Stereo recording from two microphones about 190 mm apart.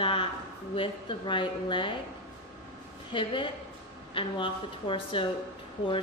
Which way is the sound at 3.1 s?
25° left (ahead or behind).